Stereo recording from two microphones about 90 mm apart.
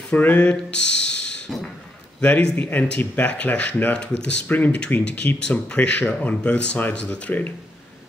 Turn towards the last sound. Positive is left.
turn(degrees=15)  # may be behind; listen again after turning